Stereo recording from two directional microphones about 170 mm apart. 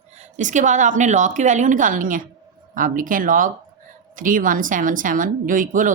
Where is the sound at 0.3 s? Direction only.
45° right (ahead or behind).